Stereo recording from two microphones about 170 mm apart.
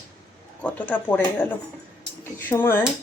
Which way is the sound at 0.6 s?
10° left (ahead or behind).